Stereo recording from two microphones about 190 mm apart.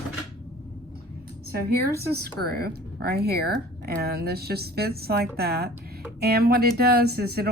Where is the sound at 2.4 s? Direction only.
55° right (ahead or behind).